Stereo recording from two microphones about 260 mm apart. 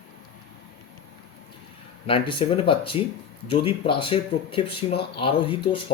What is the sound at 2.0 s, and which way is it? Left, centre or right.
Speech, centre.